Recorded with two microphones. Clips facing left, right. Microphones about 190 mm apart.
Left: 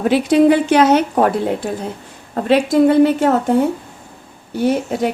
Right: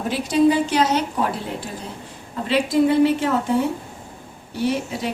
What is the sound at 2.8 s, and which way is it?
Speech, 50° left (ahead or behind).